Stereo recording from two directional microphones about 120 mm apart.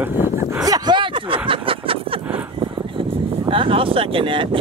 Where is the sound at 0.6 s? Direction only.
35° right (ahead or behind).